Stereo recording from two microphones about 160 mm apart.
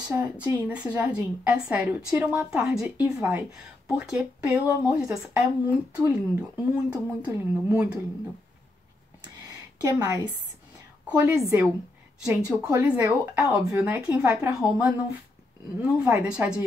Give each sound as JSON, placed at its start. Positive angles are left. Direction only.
{"t": 0.1, "sound": "speech", "side_deg": -10}
{"t": 3.2, "sound": "speech", "side_deg": -15}
{"t": 9.2, "sound": "a sound", "side_deg": -25}
{"t": 11.1, "sound": "speech", "side_deg": -5}
{"t": 12.4, "sound": "speech", "side_deg": -5}